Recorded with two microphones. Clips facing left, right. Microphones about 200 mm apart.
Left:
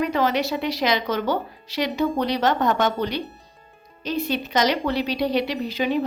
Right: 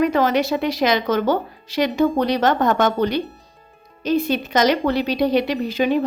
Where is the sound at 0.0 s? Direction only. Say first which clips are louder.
Right 4 dB; 50° right (ahead or behind).